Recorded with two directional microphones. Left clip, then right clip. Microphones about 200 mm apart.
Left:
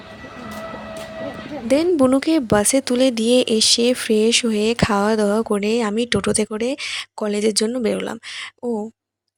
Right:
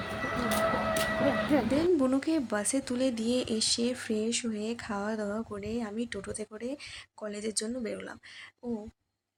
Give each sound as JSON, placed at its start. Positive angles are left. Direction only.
{"t": 1.6, "sound": "speech", "side_deg": 45}